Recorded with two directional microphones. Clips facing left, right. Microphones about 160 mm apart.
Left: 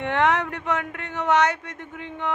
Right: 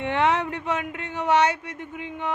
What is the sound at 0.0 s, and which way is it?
A man's voice, 15° right (ahead or behind).